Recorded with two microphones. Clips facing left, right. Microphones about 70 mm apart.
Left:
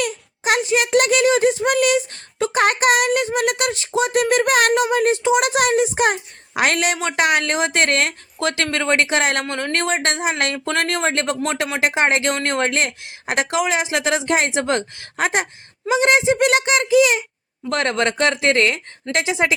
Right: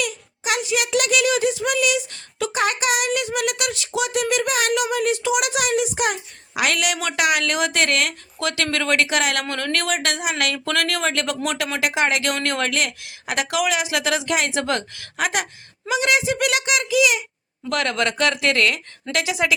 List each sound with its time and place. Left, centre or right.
0.0 s a sound: left
5.2 s a woman's voice: left
9.4 s speech: centre